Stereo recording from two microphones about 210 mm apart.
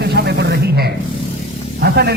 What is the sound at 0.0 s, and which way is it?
Snake, 50° right (ahead or behind).